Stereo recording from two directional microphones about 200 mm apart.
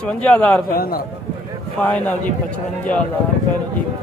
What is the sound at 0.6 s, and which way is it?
Speech, 50° left (ahead or behind).